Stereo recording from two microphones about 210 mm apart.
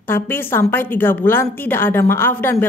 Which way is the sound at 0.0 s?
10° left (ahead or behind).